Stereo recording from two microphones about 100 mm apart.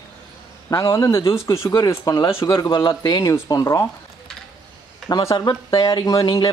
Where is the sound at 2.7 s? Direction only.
50° left (ahead or behind).